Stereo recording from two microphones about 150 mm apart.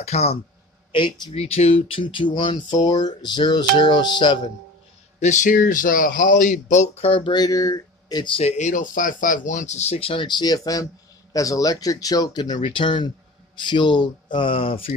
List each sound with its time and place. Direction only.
0.0 s speech: 45° left (ahead or behind)
0.9 s speech: 30° left (ahead or behind)
1.3 s speech: 45° left (ahead or behind)
5.2 s speech: 55° left (ahead or behind); by 8.3 s 25° left (ahead or behind)
8.4 s speech: 50° left (ahead or behind)